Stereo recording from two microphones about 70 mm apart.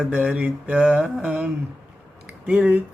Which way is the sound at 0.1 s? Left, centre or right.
Centre.